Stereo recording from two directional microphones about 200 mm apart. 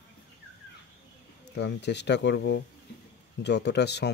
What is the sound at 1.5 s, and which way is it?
Speech, 60° left (ahead or behind).